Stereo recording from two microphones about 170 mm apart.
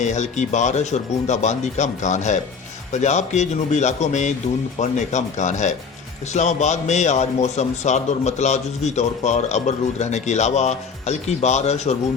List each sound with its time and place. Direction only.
0.0 s a man's voice: 45° left (ahead or behind)